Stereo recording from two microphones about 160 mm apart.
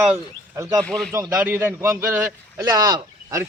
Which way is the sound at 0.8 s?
5° left (ahead or behind).